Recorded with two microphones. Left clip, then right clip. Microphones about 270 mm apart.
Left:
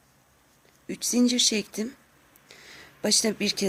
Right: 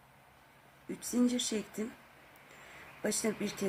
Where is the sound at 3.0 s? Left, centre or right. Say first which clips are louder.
Left 10 dB; left.